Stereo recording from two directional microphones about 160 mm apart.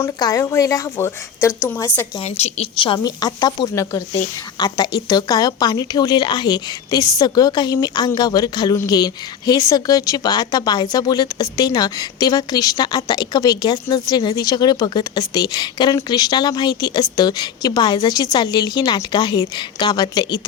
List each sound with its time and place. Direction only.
0.0 s a woman's voice: 20° left (ahead or behind)
2.1 s a woman's voice: 40° left (ahead or behind)